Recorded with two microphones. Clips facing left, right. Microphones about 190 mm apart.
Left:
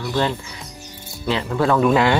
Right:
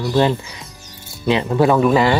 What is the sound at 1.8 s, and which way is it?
Speech, centre (ahead or behind).